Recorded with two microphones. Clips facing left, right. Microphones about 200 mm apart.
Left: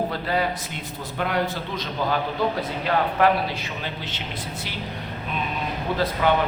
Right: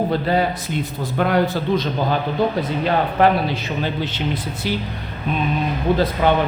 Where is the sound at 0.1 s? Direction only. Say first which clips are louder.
Right 6 dB; 25° right (ahead or behind).